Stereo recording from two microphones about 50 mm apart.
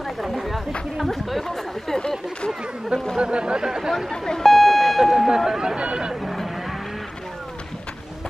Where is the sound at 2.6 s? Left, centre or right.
Centre.